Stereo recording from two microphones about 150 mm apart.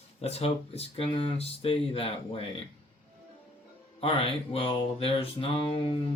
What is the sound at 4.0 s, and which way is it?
Speech, 40° left (ahead or behind).